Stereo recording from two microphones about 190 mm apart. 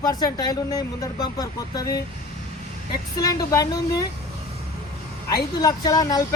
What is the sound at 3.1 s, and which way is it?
Speech, 20° left (ahead or behind).